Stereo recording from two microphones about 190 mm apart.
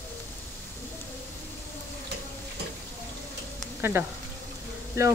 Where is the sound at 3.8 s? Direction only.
10° right (ahead or behind).